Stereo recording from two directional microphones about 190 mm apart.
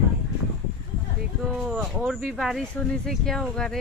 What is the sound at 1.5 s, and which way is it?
Speech, 5° right (ahead or behind).